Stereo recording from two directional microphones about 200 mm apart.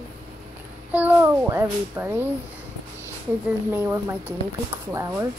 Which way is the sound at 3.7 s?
10° right (ahead or behind).